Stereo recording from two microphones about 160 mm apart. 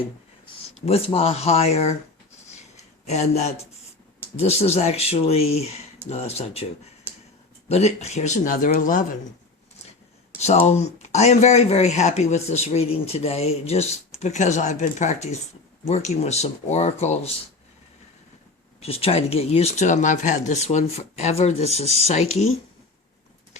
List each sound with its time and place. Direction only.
0.4 s speech: 40° left (ahead or behind)
2.6 s a sound: 45° left (ahead or behind)
4.4 s speech: 40° left (ahead or behind)
7.7 s speech: 45° left (ahead or behind)
10.4 s speech: 45° left (ahead or behind)
18.8 s speech: 40° left (ahead or behind)